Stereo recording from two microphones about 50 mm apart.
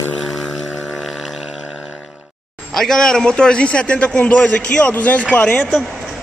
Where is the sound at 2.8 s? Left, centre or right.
Centre.